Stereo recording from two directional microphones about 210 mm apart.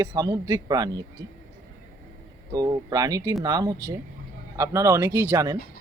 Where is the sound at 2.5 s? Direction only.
15° right (ahead or behind).